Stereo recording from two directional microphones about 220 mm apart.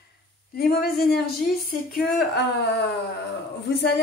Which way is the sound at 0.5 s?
45° left (ahead or behind).